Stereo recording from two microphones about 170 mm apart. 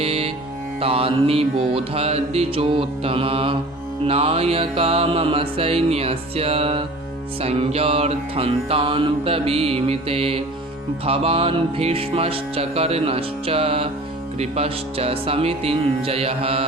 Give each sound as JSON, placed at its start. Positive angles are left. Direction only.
{"t": 0.0, "sound": "music", "side_deg": -35}